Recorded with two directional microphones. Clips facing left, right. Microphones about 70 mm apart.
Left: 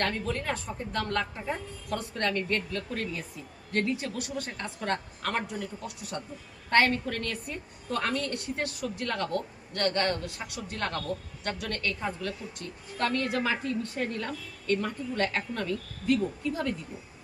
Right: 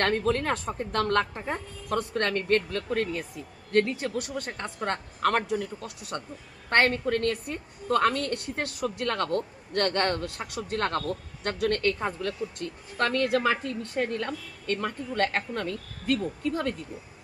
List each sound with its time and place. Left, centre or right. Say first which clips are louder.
0.0 s a woman's voice: right 5 dB; right
5.2 s speech: right 7 dB; right
6.7 s a woman's voice: right 1 dB; right
9.0 s speech: right 3 dB; right
9.7 s a woman's voice: right 2 dB; right